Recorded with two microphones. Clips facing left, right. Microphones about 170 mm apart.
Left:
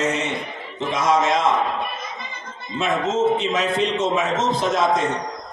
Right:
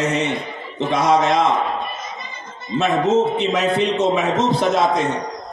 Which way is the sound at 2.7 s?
65° right (ahead or behind).